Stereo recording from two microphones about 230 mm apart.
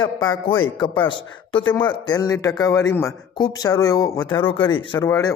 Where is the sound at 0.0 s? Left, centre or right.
Centre.